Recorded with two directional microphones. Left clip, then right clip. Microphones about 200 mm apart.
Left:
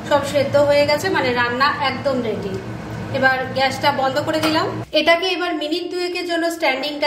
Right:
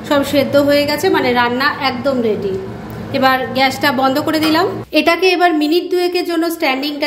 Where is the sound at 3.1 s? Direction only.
45° right (ahead or behind).